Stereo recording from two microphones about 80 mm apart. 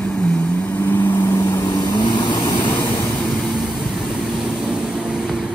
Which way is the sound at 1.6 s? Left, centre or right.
Left.